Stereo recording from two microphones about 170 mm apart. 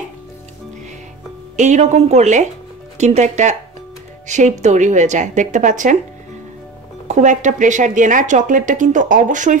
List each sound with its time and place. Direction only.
1.6 s speech: 45° right (ahead or behind)
7.1 s speech: 45° right (ahead or behind)